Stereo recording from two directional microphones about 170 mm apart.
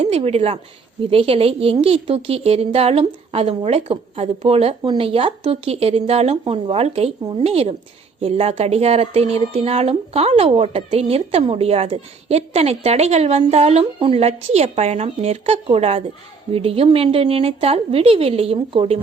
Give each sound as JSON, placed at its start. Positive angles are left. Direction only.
{"t": 0.0, "sound": "speech", "side_deg": -35}